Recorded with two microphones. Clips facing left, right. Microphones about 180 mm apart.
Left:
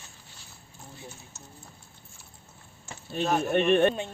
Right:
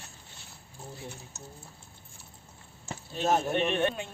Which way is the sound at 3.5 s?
55° left (ahead or behind).